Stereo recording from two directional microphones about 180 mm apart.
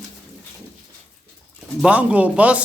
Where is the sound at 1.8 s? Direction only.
5° right (ahead or behind).